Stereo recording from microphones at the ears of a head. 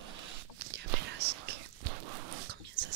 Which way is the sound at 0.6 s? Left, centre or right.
Right.